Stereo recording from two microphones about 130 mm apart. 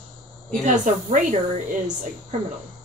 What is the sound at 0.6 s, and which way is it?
A woman's voice, 70° right (ahead or behind).